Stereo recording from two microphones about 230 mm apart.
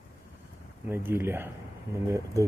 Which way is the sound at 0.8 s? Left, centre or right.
Centre.